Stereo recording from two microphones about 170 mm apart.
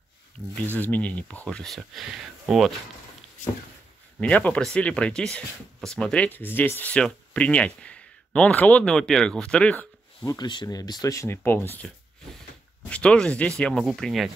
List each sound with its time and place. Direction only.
0.7 s speech: 10° left (ahead or behind)
4.2 s speech: 10° left (ahead or behind)
10.2 s speech: 25° left (ahead or behind)
12.9 s speech: 5° left (ahead or behind)